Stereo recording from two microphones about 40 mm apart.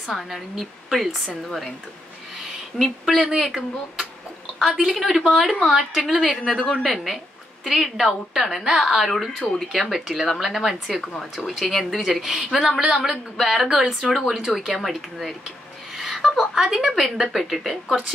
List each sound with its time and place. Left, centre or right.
0.1 s a woman's voice: centre
2.7 s a woman's voice: centre
3.3 s a woman's voice: centre
9.4 s a woman's voice: centre
9.7 s a woman's voice: centre
10.9 s a woman's voice: centre